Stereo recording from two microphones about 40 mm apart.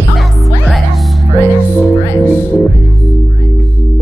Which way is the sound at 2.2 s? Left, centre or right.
Left.